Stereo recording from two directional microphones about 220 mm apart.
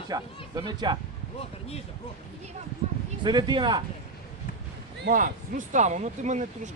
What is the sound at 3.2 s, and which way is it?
Speech, 20° right (ahead or behind).